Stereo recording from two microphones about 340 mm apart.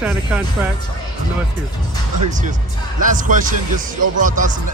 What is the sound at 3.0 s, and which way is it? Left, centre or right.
Speech, right.